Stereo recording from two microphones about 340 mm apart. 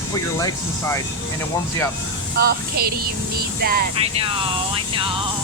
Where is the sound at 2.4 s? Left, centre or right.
Right.